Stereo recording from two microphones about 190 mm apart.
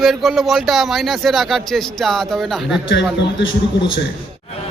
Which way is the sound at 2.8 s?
70° left (ahead or behind).